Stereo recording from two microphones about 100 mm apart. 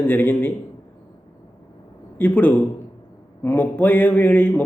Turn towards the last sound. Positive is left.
turn(degrees=15)  # may be behind; listen again after turning